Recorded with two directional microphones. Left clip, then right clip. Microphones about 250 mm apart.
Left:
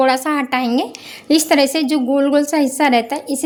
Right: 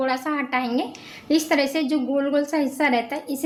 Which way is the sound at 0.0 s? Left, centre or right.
Left.